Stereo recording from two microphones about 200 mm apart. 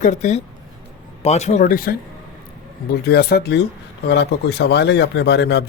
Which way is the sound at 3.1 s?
55° left (ahead or behind).